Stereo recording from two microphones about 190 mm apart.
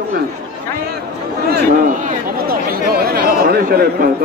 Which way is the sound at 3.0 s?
50° right (ahead or behind).